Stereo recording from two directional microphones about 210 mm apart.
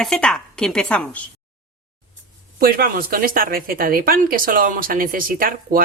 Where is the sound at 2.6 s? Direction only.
45° right (ahead or behind).